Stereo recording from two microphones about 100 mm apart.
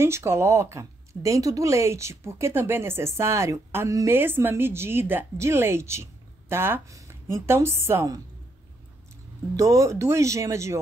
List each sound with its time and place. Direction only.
0.0 s a woman's voice: 25° right (ahead or behind)
9.6 s speech: 35° right (ahead or behind)